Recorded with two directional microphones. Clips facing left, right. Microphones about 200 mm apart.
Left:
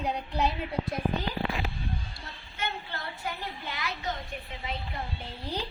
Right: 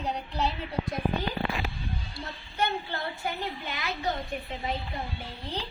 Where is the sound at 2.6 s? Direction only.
25° right (ahead or behind).